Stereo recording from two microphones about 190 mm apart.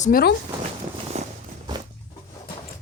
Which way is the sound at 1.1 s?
35° right (ahead or behind).